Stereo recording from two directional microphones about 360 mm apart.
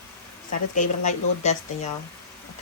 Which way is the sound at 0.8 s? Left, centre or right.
Centre.